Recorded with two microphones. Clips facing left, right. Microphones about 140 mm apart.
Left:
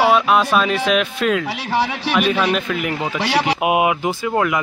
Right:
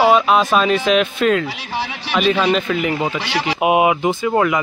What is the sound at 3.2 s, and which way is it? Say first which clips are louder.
Speech: left 3 dB; 55° left (ahead or behind).